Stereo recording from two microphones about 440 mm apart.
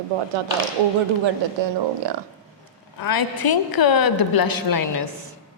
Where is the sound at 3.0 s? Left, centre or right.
Left.